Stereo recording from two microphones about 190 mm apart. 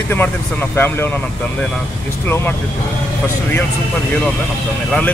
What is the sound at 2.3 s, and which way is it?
Speech, 10° left (ahead or behind).